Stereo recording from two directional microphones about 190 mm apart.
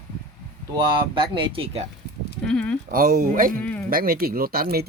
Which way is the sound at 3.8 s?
50° right (ahead or behind).